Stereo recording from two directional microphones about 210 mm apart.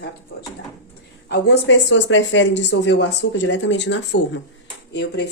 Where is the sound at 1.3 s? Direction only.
55° left (ahead or behind).